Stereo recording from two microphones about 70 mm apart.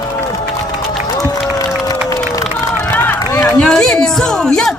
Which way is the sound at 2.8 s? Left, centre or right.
Left.